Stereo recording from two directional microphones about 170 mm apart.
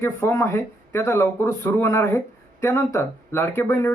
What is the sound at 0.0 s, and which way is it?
Speech, 15° left (ahead or behind).